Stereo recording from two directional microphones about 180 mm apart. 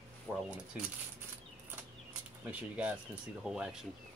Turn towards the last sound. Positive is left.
turn(degrees=-5)  # may be behind; listen again after turning